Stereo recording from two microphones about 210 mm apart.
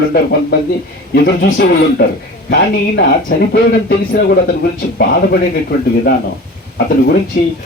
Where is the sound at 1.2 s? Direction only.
50° left (ahead or behind).